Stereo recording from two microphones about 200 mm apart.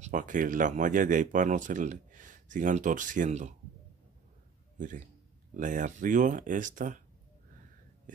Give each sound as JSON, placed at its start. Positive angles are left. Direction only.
{"t": 0.0, "sound": "speech", "side_deg": -40}
{"t": 4.7, "sound": "a man's voice", "side_deg": -40}